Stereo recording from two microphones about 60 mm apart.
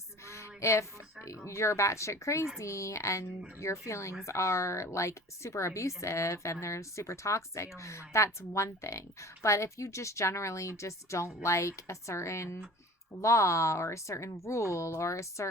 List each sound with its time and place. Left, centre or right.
0.3 s a woman's voice: left